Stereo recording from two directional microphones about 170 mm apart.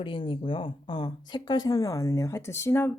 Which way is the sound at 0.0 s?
30° left (ahead or behind).